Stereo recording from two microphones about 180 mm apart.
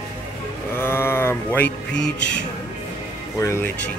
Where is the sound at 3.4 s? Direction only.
15° left (ahead or behind).